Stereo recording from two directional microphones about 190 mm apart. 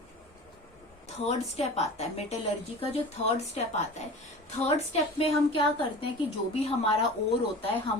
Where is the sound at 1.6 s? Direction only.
35° left (ahead or behind).